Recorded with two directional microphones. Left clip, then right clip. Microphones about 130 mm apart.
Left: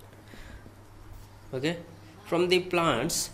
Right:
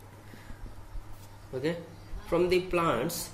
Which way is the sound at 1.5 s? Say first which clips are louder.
Left 1 dB; 40° left (ahead or behind).